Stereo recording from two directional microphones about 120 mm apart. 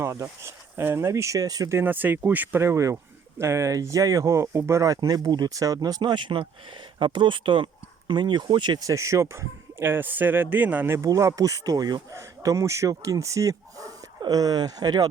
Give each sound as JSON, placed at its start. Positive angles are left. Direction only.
{"t": 0.0, "sound": "speech", "side_deg": -25}
{"t": 1.8, "sound": "speech", "side_deg": -15}